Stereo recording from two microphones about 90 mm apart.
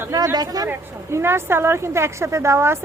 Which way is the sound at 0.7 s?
25° right (ahead or behind).